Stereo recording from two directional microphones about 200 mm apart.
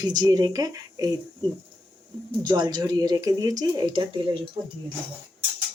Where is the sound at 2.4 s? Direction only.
20° right (ahead or behind).